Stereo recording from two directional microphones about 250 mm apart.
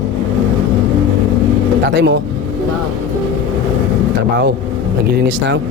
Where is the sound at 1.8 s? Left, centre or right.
Right.